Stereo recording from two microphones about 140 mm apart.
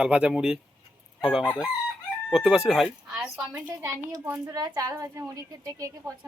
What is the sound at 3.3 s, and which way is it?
A woman's voice, 10° right (ahead or behind).